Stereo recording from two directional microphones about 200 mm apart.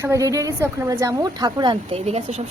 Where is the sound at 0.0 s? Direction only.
15° right (ahead or behind).